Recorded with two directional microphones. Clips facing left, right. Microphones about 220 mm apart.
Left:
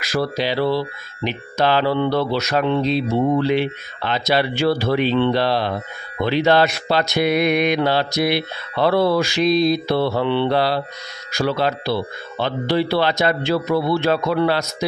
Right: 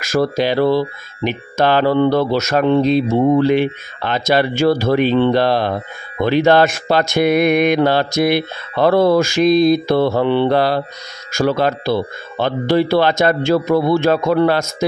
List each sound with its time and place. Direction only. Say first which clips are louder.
0.0 s speech: right 5 dB; 45° right (ahead or behind)